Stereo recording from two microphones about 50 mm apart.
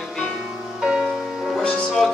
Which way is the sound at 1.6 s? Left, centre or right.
Centre.